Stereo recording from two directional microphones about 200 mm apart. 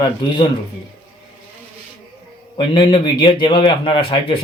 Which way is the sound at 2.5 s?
25° left (ahead or behind).